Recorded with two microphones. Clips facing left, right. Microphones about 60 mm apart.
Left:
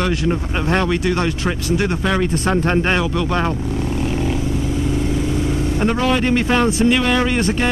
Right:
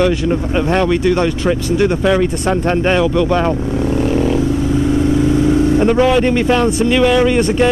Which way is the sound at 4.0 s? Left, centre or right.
Right.